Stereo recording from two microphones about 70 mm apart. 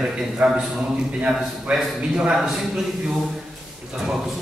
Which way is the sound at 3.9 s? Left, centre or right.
Centre.